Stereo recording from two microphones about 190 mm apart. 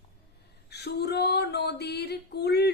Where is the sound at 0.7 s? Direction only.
60° left (ahead or behind).